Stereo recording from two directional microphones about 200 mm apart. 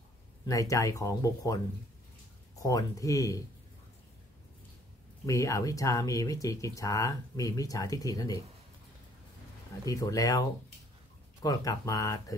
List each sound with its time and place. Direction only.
0.5 s speech: 15° left (ahead or behind)
2.6 s speech: 15° left (ahead or behind)
5.2 s speech: 15° left (ahead or behind)
9.8 s speech: 15° left (ahead or behind)
11.4 s speech: 20° left (ahead or behind)